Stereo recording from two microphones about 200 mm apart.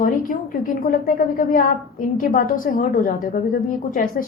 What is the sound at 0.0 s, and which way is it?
A woman's voice, 40° left (ahead or behind).